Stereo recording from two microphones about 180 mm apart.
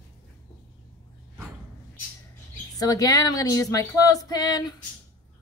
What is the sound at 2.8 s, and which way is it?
Speech, 20° left (ahead or behind).